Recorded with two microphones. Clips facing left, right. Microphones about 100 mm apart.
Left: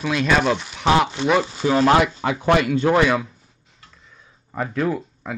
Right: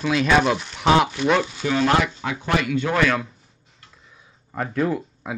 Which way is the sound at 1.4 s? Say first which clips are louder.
Left 4 dB; 30° left (ahead or behind).